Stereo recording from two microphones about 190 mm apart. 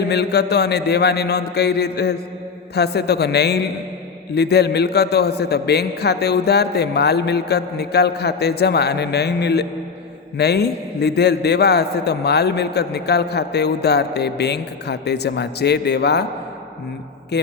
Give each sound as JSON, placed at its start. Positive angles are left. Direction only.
{"t": 0.1, "sound": "a man's voice", "side_deg": 60}
{"t": 17.3, "sound": "a man's voice", "side_deg": 60}